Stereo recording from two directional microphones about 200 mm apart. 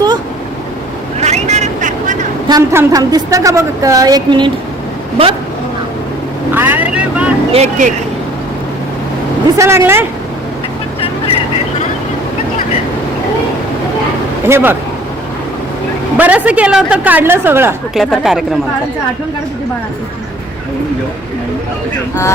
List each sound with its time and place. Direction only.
1.2 s vehicle: 35° right (ahead or behind)
2.5 s a woman's voice: 15° right (ahead or behind)
6.5 s speech: 10° right (ahead or behind)
7.5 s speech: 35° right (ahead or behind)
9.6 s a woman's voice: 15° right (ahead or behind)
14.4 s a woman's voice: 10° right (ahead or behind)
16.1 s a woman's voice: 5° right (ahead or behind)
17.9 s speech: centre (ahead or behind)